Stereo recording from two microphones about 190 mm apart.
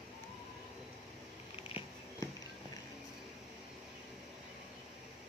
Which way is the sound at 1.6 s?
30° left (ahead or behind).